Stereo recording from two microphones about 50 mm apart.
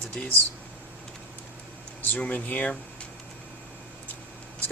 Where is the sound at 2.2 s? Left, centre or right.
Left.